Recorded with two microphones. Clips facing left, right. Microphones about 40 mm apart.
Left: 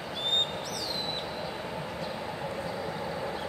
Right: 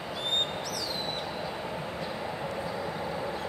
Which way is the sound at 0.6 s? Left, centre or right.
Left.